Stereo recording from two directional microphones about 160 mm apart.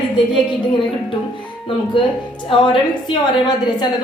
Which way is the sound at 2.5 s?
30° left (ahead or behind).